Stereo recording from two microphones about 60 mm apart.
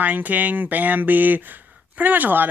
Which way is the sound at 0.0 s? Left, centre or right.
Right.